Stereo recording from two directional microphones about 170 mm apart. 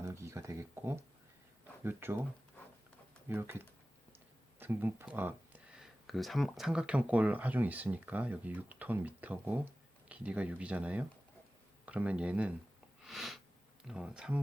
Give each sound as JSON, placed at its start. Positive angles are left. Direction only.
{"t": 0.0, "sound": "speech", "side_deg": -15}
{"t": 3.2, "sound": "speech", "side_deg": -15}
{"t": 4.6, "sound": "speech", "side_deg": -10}